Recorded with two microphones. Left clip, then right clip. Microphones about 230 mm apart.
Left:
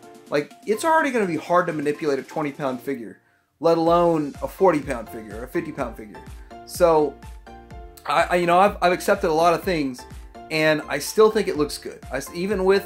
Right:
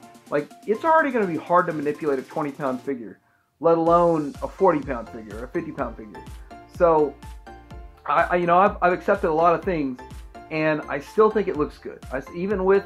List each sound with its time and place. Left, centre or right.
0.3 s speech: left
8.0 s speech: left